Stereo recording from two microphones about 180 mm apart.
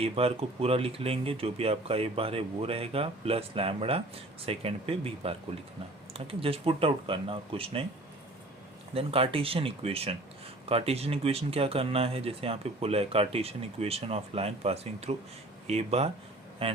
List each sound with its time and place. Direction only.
0.0 s speech: 35° right (ahead or behind)
8.9 s speech: 30° right (ahead or behind)